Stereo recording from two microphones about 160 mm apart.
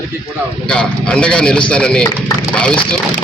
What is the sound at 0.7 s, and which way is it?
Speech, 5° left (ahead or behind).